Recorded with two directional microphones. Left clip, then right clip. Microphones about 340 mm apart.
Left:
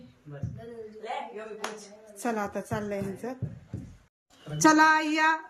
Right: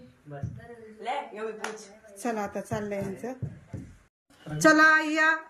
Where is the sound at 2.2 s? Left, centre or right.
Centre.